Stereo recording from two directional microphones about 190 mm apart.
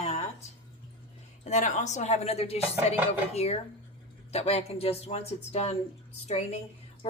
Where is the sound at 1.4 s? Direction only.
40° left (ahead or behind).